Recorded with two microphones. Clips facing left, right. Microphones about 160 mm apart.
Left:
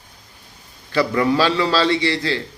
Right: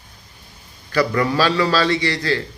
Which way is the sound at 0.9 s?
20° left (ahead or behind).